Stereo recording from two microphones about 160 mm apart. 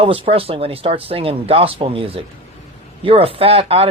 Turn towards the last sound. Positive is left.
turn(degrees=-35)  # may be behind; listen again after turning